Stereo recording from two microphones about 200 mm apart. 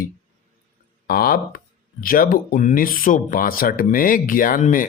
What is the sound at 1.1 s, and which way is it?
Speech, 45° left (ahead or behind).